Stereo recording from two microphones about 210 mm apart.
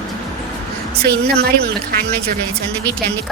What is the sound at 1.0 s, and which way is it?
Speech, 50° right (ahead or behind).